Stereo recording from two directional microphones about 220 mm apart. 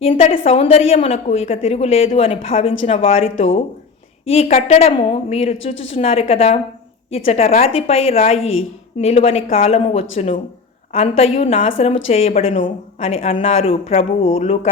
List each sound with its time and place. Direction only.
0.0 s a woman's voice: 25° left (ahead or behind)